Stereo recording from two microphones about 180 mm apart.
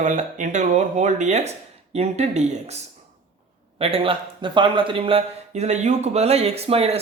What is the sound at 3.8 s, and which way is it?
Speech, 30° right (ahead or behind).